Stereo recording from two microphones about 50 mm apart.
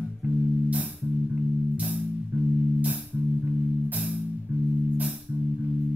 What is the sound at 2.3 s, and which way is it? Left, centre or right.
Music, right.